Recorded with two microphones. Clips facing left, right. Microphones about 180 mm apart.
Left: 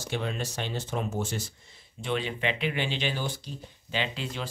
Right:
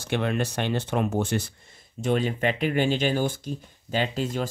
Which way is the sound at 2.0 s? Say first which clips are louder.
Right 6 dB; 45° right (ahead or behind).